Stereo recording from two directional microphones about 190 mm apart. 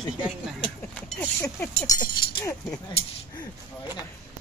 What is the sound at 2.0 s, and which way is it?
Speech, 20° left (ahead or behind).